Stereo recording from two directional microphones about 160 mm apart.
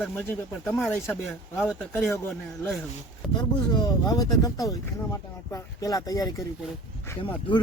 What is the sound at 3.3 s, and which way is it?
Speech, 25° left (ahead or behind).